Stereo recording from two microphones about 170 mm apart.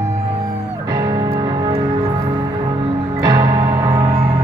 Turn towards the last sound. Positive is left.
turn(degrees=-20)  # may be behind; listen again after turning